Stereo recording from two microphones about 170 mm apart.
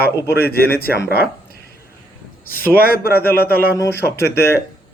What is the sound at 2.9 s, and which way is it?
Speech, 65° left (ahead or behind).